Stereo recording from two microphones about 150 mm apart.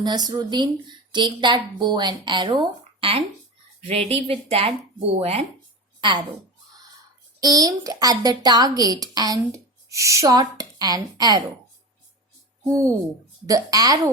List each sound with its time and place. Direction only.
0.0 s a woman's voice: 25° right (ahead or behind)
7.3 s speech: 25° right (ahead or behind)
12.6 s speech: 20° right (ahead or behind)